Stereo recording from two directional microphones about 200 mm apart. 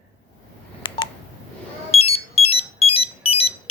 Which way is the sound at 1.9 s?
30° left (ahead or behind).